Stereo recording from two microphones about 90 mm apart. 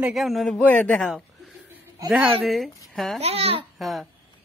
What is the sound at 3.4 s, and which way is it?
Speech, 90° right.